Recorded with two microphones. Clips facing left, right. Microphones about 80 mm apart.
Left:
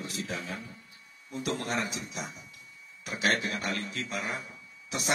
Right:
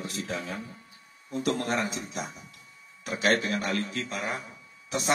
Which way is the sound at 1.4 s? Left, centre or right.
Right.